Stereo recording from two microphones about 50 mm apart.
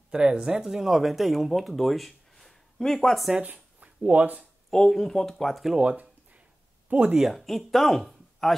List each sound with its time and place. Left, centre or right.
0.1 s speech: centre
3.4 s speech: right
4.6 s speech: centre
5.8 s a sound: right
6.9 s speech: right
7.2 s speech: centre